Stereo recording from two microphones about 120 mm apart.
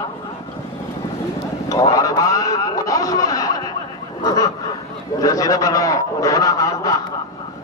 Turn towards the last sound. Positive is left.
turn(degrees=30)  # may be behind; listen again after turning